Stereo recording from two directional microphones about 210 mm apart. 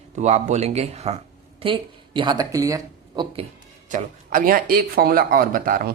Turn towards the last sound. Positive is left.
turn(degrees=-40)  # may be behind; listen again after turning